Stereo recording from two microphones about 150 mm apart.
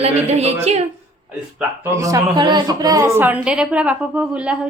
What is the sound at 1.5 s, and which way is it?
A woman's voice, 15° right (ahead or behind).